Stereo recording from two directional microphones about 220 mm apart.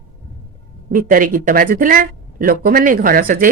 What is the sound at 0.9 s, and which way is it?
Speech, 40° right (ahead or behind).